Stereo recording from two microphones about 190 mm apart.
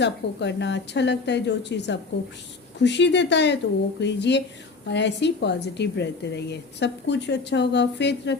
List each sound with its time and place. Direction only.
0.0 s a woman's voice: 65° left (ahead or behind)